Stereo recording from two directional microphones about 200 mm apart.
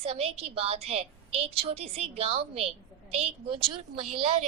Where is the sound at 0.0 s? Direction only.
30° right (ahead or behind).